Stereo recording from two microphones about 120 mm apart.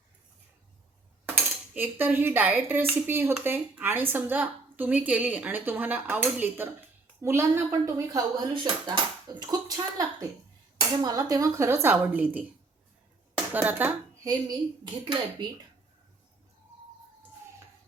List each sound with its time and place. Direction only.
1.4 s cutlery: 15° right (ahead or behind)
7.2 s speech: 20° right (ahead or behind)
8.5 s a woman's voice: 40° right (ahead or behind); by 12.5 s 15° right (ahead or behind)
13.5 s cutlery: 15° right (ahead or behind)
14.8 s a woman's voice: 40° right (ahead or behind)